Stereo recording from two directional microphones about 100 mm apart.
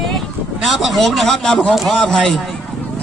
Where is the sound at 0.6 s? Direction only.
Centre (ahead or behind).